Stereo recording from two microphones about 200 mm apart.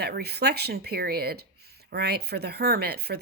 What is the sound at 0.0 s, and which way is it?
A woman's voice, 55° right (ahead or behind).